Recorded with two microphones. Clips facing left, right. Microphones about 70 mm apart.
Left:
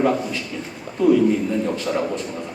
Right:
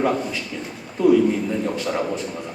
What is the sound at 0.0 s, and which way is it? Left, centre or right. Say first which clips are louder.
A man's voice: left 2 dB; centre.